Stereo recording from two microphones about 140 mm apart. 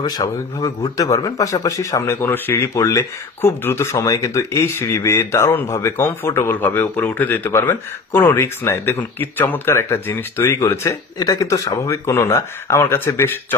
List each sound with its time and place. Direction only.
0.2 s speech: 25° left (ahead or behind)